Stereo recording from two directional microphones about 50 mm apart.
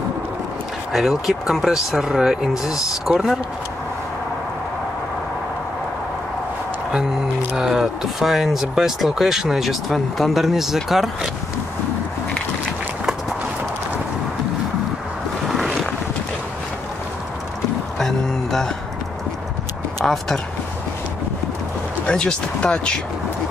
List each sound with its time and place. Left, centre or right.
0.9 s speech: centre
7.5 s speech: centre
15.4 s vehicle: centre
17.9 s a sound: centre
20.0 s a sound: centre
22.0 s speech: centre